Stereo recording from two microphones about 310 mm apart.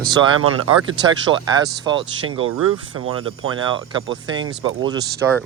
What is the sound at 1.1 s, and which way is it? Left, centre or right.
Speech, centre.